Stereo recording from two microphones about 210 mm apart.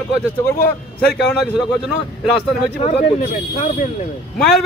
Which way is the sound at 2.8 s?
35° left (ahead or behind).